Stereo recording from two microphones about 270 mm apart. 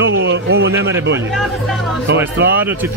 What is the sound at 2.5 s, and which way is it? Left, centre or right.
Speech, centre.